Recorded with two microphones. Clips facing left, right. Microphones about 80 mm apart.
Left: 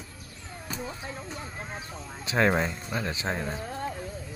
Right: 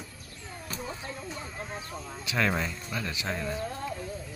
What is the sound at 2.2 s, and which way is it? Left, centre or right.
Speech, left.